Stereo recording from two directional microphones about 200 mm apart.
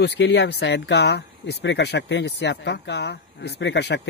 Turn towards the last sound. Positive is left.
turn(degrees=60)  # may be behind; listen again after turning